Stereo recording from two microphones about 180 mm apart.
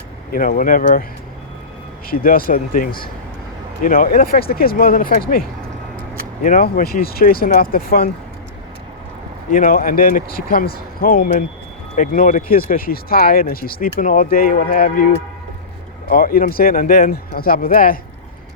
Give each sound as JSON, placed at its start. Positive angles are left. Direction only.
{"t": 0.3, "sound": "speech", "side_deg": 55}
{"t": 2.0, "sound": "a man's voice", "side_deg": 55}
{"t": 9.5, "sound": "a man's voice", "side_deg": 50}